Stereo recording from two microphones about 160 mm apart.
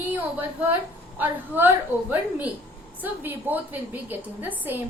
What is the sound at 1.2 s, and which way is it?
A woman's voice, 10° right (ahead or behind).